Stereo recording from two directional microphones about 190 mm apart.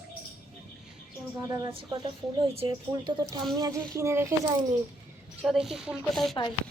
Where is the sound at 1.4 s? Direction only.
20° right (ahead or behind).